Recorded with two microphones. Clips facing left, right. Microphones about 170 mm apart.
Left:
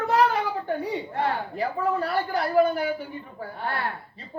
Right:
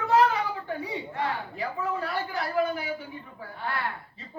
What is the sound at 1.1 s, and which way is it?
A woman's voice, 60° left (ahead or behind).